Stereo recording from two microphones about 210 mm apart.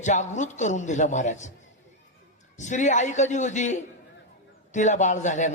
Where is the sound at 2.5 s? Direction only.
35° left (ahead or behind).